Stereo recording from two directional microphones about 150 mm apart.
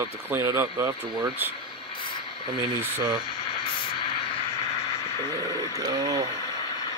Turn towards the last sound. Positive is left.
turn(degrees=-25)  # may be behind; listen again after turning